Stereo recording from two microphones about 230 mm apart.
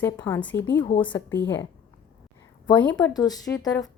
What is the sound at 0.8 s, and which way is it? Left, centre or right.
Speech, left.